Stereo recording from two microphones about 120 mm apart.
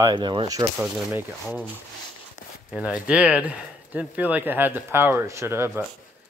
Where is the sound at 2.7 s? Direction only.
10° right (ahead or behind).